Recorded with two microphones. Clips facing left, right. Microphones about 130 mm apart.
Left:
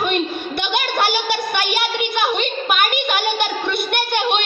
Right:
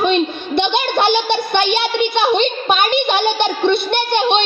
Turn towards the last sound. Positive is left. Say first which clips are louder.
# right 4 dB
turn(degrees=-25)  # may be behind; listen again after turning